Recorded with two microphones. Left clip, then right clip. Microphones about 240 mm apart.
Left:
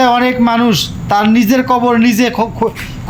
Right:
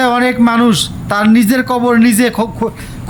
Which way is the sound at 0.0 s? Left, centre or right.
Centre.